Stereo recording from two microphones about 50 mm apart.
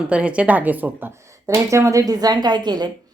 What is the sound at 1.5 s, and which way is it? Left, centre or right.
Speech, right.